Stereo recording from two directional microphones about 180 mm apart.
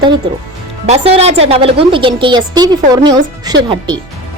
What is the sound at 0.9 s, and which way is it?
Speech, 35° right (ahead or behind).